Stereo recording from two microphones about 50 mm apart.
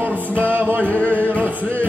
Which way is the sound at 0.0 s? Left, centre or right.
Right.